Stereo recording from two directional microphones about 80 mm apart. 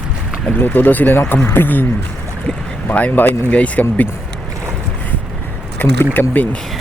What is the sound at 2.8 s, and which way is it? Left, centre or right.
Speech, left.